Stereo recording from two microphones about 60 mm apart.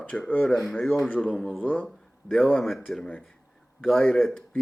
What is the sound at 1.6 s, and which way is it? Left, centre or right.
Speech, left.